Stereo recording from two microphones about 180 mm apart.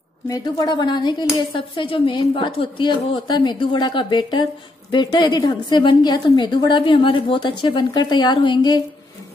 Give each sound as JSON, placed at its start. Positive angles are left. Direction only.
{"t": 0.3, "sound": "speech", "side_deg": 20}